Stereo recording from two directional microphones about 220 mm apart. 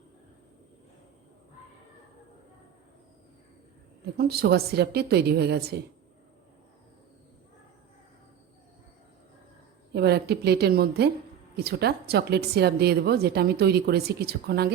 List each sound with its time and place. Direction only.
4.2 s speech: 45° right (ahead or behind)
9.9 s speech: 45° right (ahead or behind)